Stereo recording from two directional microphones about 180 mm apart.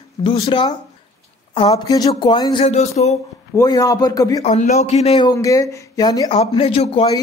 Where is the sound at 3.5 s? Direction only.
20° left (ahead or behind).